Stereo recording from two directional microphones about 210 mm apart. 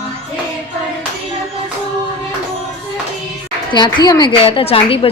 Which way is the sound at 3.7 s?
20° left (ahead or behind).